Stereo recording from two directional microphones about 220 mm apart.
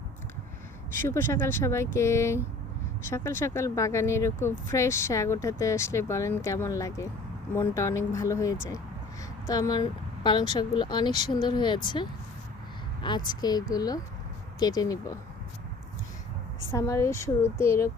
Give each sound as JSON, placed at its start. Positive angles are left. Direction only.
{"t": 1.0, "sound": "speech", "side_deg": 10}
{"t": 16.7, "sound": "speech", "side_deg": 15}